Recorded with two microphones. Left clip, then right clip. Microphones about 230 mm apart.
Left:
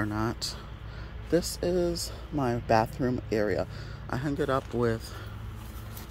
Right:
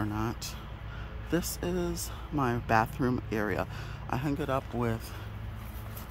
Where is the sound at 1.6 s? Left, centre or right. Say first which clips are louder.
Left 6 dB; centre.